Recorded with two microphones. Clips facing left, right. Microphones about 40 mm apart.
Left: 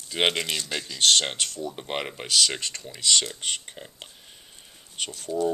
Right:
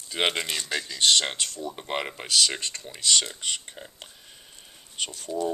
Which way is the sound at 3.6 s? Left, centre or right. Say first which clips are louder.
Left 1 dB; centre.